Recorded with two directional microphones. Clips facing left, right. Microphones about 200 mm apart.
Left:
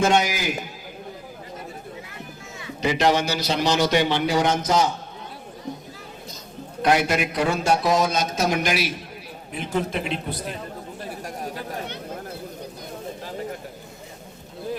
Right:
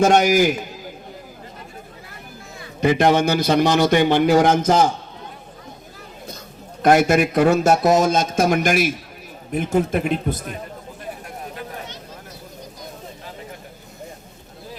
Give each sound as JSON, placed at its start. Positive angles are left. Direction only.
{"t": 0.0, "sound": "speech", "side_deg": -50}
{"t": 2.8, "sound": "speech", "side_deg": -50}
{"t": 6.8, "sound": "speech", "side_deg": -50}